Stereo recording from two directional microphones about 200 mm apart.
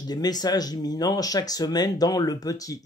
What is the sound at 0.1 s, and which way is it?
Speech, 20° left (ahead or behind).